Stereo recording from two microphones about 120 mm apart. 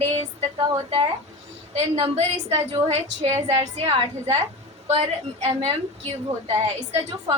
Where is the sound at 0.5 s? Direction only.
50° right (ahead or behind).